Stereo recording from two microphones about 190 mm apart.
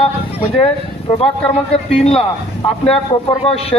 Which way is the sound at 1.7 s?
30° left (ahead or behind).